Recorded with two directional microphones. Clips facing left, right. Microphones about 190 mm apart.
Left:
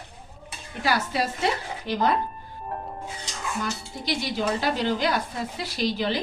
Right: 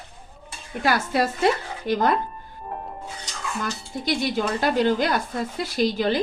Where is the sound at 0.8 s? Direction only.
50° right (ahead or behind).